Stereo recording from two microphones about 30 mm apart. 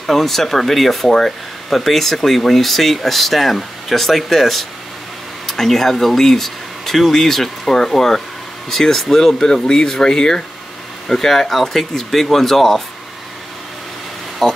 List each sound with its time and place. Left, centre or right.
0.0 s speech: centre
9.4 s speech: left
14.4 s a sound: centre